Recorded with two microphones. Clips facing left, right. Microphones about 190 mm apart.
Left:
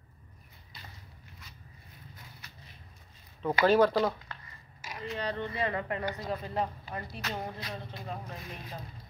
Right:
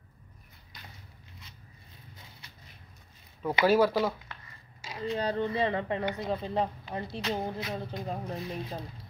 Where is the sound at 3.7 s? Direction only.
5° right (ahead or behind).